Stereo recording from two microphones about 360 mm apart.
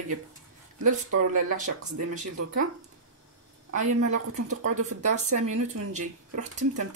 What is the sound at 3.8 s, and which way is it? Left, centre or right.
Speech, right.